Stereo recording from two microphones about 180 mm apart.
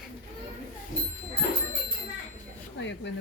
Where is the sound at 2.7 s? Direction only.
80° left.